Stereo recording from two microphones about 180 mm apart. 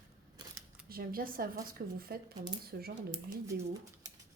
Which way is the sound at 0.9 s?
55° right (ahead or behind).